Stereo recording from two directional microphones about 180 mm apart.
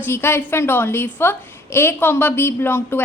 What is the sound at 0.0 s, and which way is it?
A woman's voice, 15° left (ahead or behind).